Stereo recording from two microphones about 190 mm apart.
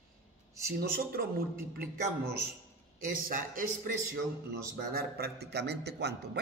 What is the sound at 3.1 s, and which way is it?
A man's voice, 45° right (ahead or behind).